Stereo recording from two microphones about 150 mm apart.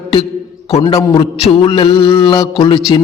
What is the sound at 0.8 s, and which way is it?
Mantra, 30° left (ahead or behind).